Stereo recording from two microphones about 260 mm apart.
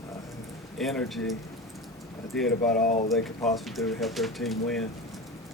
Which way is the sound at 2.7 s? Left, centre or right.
Left.